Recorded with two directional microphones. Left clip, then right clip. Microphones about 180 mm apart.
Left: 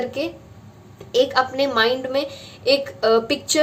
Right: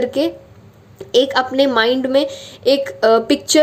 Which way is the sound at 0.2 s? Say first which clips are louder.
Right 8 dB; 35° right (ahead or behind).